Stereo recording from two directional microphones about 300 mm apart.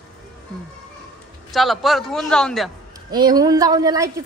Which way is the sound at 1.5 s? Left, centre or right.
Centre.